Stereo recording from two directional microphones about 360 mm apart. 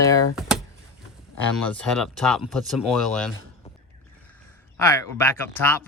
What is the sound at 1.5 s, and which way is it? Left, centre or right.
Speech, centre.